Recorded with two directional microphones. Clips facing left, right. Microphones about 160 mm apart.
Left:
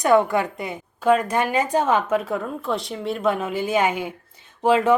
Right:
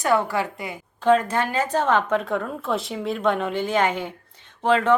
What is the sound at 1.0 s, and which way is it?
A woman's voice, 10° left (ahead or behind).